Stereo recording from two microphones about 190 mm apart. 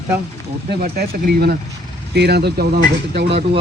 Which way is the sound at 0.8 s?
55° right (ahead or behind).